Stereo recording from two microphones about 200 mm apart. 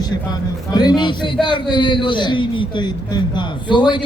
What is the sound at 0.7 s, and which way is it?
A man's voice, 20° left (ahead or behind).